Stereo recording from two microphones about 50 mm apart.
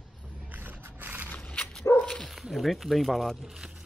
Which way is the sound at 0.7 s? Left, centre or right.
Right.